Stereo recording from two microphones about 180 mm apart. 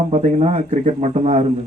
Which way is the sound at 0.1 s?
35° right (ahead or behind).